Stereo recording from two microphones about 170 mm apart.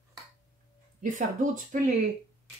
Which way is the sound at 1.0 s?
50° right (ahead or behind).